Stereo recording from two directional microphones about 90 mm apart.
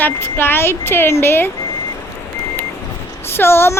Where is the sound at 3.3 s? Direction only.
25° left (ahead or behind).